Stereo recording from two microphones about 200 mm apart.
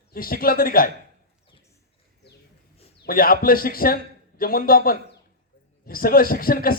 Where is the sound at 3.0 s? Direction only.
45° left (ahead or behind).